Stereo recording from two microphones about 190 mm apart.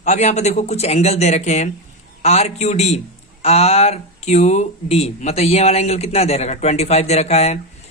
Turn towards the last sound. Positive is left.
turn(degrees=35)  # may be behind; listen again after turning